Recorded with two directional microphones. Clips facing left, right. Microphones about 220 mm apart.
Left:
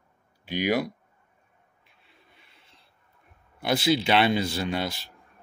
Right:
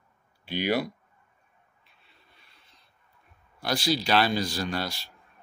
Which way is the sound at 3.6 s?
20° left (ahead or behind).